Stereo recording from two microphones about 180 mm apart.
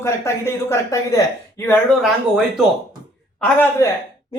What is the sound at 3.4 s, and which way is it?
Speech, 10° left (ahead or behind).